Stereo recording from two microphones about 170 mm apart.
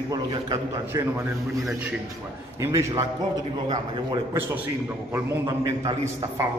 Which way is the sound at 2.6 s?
15° right (ahead or behind).